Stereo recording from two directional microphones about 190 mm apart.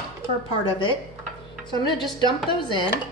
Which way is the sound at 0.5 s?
25° left (ahead or behind).